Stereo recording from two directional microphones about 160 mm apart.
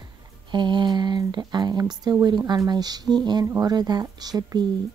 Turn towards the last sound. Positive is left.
turn(degrees=-25)  # may be behind; listen again after turning